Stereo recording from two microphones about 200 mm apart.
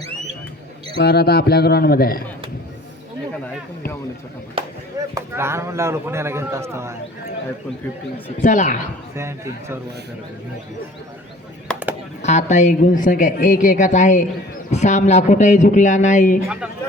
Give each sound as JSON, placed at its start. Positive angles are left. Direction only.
{"t": 0.9, "sound": "a man's voice", "side_deg": 55}
{"t": 5.1, "sound": "a man's voice", "side_deg": -15}
{"t": 8.4, "sound": "speech", "side_deg": 40}
{"t": 9.1, "sound": "a man's voice", "side_deg": -15}
{"t": 11.7, "sound": "music", "side_deg": 5}
{"t": 12.2, "sound": "speech", "side_deg": 35}